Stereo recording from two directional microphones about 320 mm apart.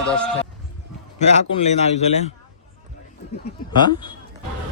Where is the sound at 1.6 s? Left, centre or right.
Centre.